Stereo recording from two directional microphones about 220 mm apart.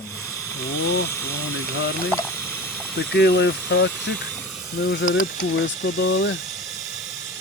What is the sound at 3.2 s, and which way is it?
Speech, 50° left (ahead or behind).